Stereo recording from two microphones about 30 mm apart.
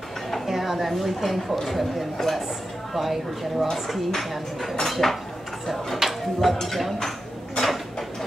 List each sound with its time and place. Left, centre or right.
0.5 s a woman's voice: centre
6.0 s speech: centre
6.4 s a woman's voice: centre
7.6 s a sound: centre